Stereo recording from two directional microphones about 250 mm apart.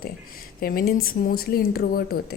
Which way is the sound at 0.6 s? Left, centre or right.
Left.